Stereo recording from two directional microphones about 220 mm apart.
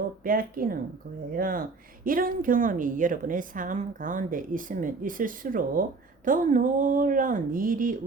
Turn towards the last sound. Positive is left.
turn(degrees=-40)  # may be behind; listen again after turning